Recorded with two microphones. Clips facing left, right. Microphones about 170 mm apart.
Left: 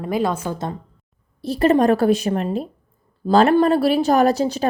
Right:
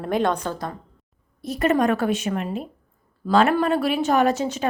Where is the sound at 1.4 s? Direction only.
30° left (ahead or behind).